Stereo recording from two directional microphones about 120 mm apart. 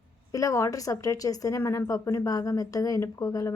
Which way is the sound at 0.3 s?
30° left (ahead or behind).